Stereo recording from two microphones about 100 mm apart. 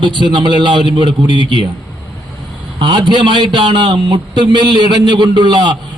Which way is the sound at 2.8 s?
50° right (ahead or behind).